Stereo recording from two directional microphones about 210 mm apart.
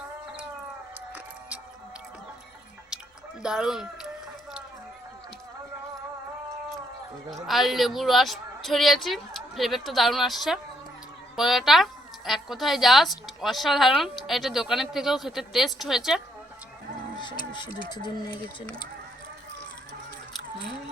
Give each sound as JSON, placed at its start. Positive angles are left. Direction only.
{"t": 2.9, "sound": "drip", "side_deg": -5}
{"t": 3.4, "sound": "speech", "side_deg": -5}
{"t": 7.3, "sound": "speech", "side_deg": 0}
{"t": 17.8, "sound": "speech", "side_deg": 20}